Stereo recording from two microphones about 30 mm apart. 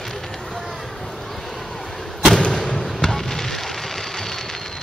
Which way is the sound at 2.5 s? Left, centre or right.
Centre.